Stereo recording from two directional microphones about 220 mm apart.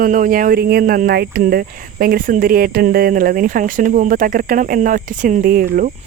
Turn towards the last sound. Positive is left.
turn(degrees=-40)  # may be behind; listen again after turning